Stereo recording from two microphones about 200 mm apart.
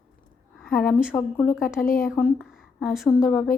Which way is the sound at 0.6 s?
5° left (ahead or behind).